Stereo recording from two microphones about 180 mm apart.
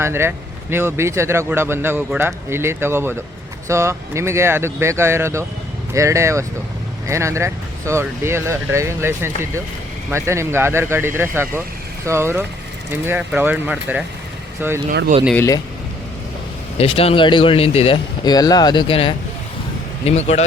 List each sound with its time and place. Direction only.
0.0 s speech: 15° right (ahead or behind)
15.4 s speech: 20° left (ahead or behind)
16.7 s speech: 35° left (ahead or behind)